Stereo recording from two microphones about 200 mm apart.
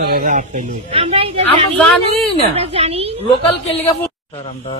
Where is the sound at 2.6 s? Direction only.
30° right (ahead or behind).